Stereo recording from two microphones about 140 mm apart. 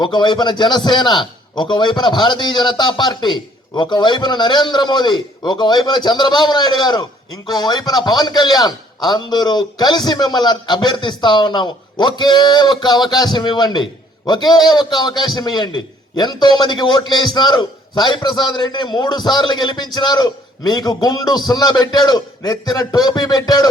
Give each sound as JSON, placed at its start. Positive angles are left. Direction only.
{"t": 0.0, "sound": "a man's voice", "side_deg": 35}